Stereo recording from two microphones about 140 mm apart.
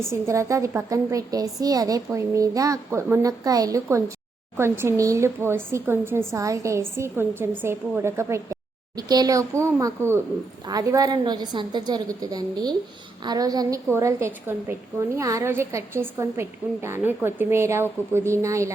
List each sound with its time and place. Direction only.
0.1 s a woman's voice: 20° right (ahead or behind)